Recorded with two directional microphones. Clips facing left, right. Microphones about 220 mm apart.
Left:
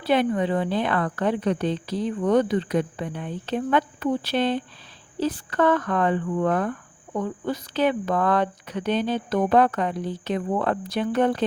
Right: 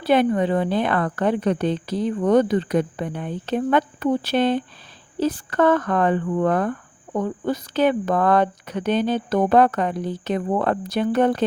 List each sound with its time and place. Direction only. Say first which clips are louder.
0.0 s speech: right 3 dB; 45° right (ahead or behind)